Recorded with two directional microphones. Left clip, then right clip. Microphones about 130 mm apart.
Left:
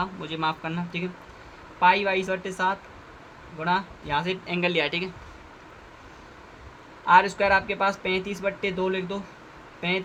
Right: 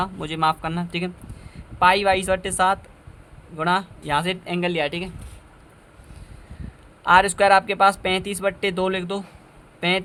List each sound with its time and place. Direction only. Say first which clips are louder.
0.0 s speech: right 6 dB; 90° right; by 5.1 s 55° right (ahead or behind)
7.0 s speech: right 3 dB; 70° right (ahead or behind); by 9.2 s 90° right